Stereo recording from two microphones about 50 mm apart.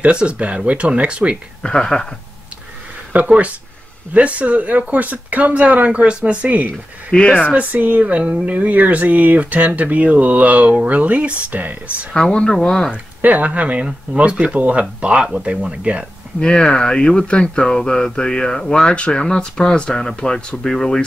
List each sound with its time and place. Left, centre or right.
0.0 s speech: right
1.6 s speech: centre
3.3 s speech: right
7.1 s speech: left
7.5 s speech: right
12.3 s speech: centre
12.9 s speech: right
16.3 s speech: centre